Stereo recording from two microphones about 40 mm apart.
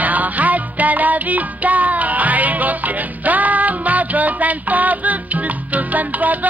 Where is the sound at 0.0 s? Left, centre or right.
Right.